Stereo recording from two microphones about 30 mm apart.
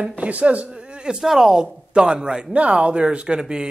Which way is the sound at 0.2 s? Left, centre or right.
Right.